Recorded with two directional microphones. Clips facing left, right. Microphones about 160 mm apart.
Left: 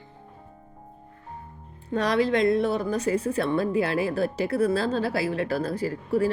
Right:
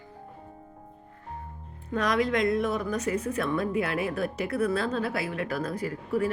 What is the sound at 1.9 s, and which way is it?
A woman's voice, 30° left (ahead or behind).